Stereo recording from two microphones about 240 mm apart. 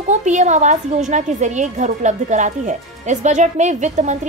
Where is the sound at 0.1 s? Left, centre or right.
Right.